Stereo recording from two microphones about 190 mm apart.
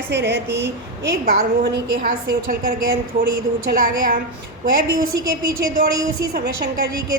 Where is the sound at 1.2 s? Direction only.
55° right (ahead or behind).